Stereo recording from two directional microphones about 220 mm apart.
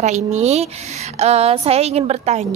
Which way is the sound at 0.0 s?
30° right (ahead or behind).